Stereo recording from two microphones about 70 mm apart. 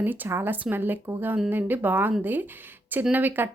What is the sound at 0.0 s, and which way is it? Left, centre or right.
Speech, right.